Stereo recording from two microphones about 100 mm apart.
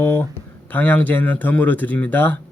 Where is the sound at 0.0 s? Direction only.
25° left (ahead or behind).